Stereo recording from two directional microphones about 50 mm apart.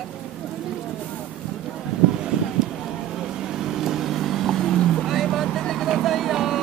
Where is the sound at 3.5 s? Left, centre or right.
Centre.